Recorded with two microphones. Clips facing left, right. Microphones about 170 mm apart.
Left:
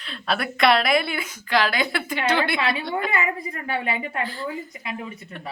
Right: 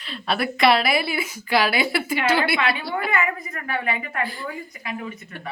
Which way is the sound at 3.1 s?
30° left (ahead or behind).